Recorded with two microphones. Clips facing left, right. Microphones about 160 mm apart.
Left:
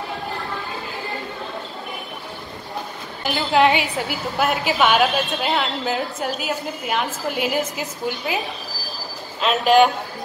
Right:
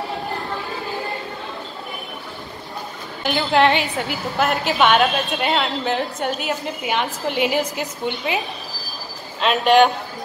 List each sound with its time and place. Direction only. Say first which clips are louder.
3.3 s a woman's voice: even; centre (ahead or behind)